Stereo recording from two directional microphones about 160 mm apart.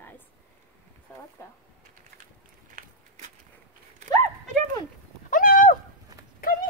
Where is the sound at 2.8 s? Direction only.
60° right (ahead or behind).